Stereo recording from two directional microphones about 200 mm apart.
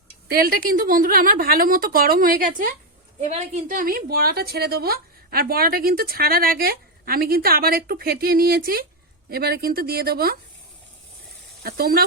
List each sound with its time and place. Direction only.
0.3 s a woman's voice: 45° right (ahead or behind)
11.6 s a woman's voice: 50° right (ahead or behind)